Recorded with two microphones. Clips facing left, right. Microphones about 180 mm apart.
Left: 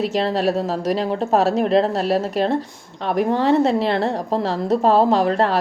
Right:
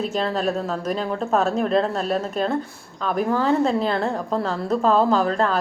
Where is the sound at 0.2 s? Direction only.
35° left (ahead or behind).